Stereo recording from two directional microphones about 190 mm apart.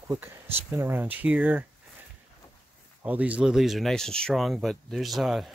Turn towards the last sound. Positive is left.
turn(degrees=0)  # may be behind; listen again after turning